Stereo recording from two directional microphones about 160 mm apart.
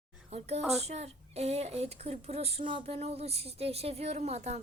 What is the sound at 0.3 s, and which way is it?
Speech, 40° right (ahead or behind).